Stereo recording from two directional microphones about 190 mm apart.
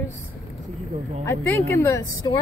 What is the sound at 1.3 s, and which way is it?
Speech, 15° left (ahead or behind).